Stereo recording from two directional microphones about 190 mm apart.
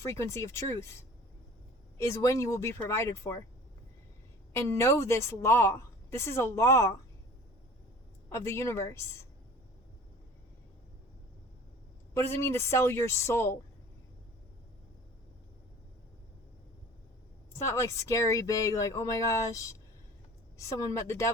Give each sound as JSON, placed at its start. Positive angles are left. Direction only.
{"t": 0.0, "sound": "a woman's voice", "side_deg": 15}
{"t": 4.5, "sound": "a woman's voice", "side_deg": 15}
{"t": 8.3, "sound": "a woman's voice", "side_deg": 15}
{"t": 12.1, "sound": "a woman's voice", "side_deg": 15}
{"t": 17.5, "sound": "a woman's voice", "side_deg": 15}